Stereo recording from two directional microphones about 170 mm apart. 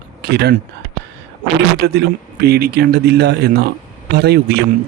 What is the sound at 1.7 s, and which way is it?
Speech, 65° right (ahead or behind).